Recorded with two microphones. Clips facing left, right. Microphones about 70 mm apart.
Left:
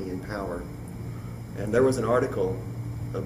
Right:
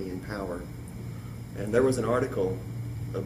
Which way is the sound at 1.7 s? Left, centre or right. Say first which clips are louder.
Left 2 dB; centre.